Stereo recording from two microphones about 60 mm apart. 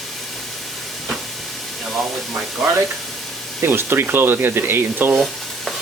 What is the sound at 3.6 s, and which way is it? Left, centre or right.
Speech, right.